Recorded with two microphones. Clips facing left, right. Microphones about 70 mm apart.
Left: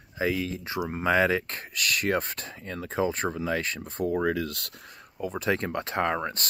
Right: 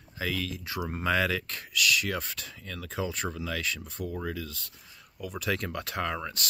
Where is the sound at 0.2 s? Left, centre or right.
Left.